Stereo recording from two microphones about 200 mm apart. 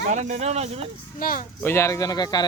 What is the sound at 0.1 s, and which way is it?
Speech, 35° right (ahead or behind).